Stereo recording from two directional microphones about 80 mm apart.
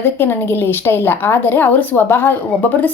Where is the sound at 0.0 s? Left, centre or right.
Left.